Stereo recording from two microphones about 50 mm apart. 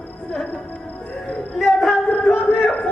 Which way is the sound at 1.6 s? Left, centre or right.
Centre.